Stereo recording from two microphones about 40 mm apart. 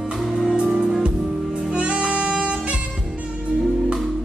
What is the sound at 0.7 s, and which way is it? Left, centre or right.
Music, centre.